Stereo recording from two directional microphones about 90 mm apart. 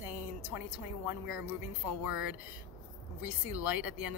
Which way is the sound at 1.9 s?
15° right (ahead or behind).